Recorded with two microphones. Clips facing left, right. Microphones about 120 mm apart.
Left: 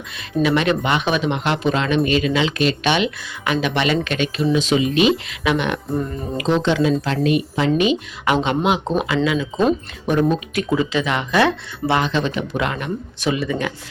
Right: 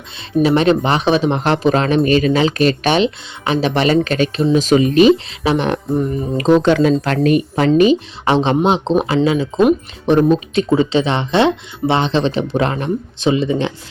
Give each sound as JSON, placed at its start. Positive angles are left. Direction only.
{"t": 0.4, "sound": "speech", "side_deg": -35}
{"t": 5.1, "sound": "speech", "side_deg": -30}
{"t": 7.8, "sound": "speech", "side_deg": -35}
{"t": 10.5, "sound": "speech", "side_deg": -30}
{"t": 13.1, "sound": "speech", "side_deg": -25}